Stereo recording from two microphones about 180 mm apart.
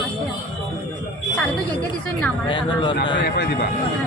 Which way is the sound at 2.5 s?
25° left (ahead or behind).